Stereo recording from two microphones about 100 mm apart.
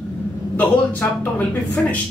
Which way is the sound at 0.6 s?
15° left (ahead or behind).